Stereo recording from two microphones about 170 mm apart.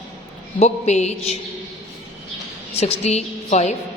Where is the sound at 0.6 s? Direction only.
40° left (ahead or behind).